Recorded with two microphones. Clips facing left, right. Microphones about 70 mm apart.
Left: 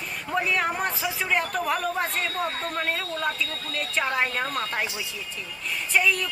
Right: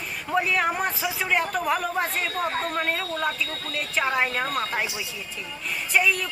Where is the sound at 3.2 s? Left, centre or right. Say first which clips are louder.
Right 1 dB; centre.